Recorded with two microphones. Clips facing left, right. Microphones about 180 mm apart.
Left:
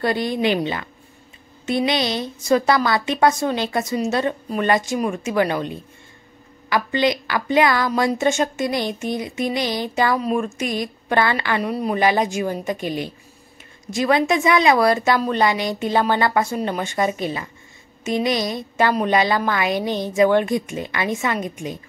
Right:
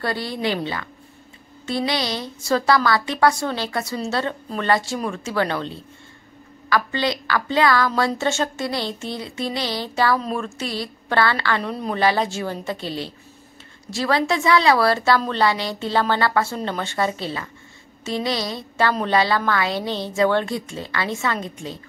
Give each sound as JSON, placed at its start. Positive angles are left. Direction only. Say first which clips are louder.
{"t": 0.0, "sound": "a woman's voice", "louder": "left 4 dB", "side_deg": 20}